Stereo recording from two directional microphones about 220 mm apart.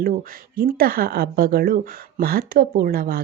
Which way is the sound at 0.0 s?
40° right (ahead or behind).